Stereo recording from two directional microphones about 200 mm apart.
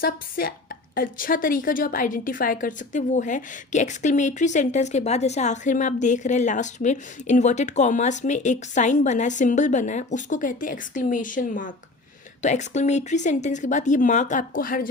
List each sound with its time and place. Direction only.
0.0 s a woman's voice: 45° left (ahead or behind)